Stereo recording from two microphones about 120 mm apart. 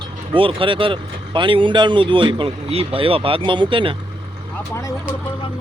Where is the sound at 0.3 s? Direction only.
45° right (ahead or behind).